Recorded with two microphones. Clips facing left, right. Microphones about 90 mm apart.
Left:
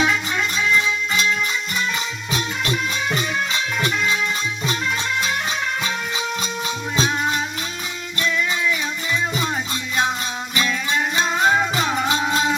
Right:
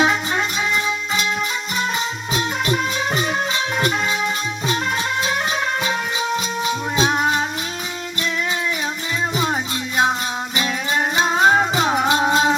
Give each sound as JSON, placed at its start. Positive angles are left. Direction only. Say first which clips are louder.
{"t": 0.0, "sound": "music", "louder": "right 2 dB", "side_deg": -35}
{"t": 3.1, "sound": "music", "louder": "right 2 dB", "side_deg": -35}
{"t": 7.1, "sound": "music", "louder": "right 3 dB", "side_deg": -25}
{"t": 9.3, "sound": "music", "louder": "right 3 dB", "side_deg": -25}
{"t": 11.9, "sound": "music", "louder": "right 4 dB", "side_deg": -15}
{"t": 12.2, "sound": "music", "louder": "right 4 dB", "side_deg": -30}